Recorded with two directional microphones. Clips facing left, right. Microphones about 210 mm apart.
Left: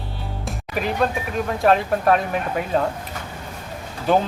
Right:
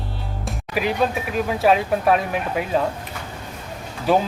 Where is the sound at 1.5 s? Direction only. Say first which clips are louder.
Even; 5° right (ahead or behind).